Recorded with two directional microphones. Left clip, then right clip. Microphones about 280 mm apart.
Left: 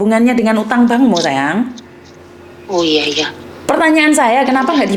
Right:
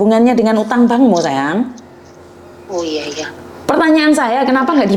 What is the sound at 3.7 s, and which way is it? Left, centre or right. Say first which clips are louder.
A woman's voice: even; centre.